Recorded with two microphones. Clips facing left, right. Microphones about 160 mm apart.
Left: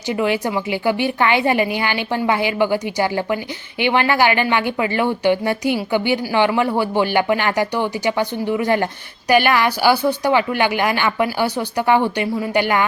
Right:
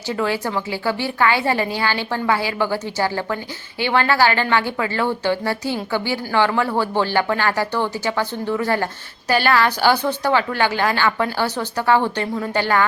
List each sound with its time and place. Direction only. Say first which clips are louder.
0.1 s a woman's voice: left 3 dB; 15° left (ahead or behind)